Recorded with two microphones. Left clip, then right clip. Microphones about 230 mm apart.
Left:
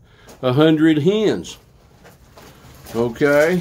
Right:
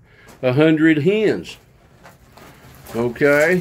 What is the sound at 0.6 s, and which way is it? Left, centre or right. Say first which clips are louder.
Speech: even; centre.